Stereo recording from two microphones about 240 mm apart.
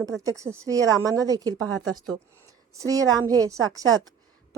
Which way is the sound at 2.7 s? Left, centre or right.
Centre.